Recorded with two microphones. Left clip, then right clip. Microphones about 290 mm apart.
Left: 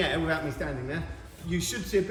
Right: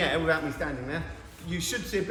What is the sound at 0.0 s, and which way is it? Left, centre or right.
A man's voice, centre.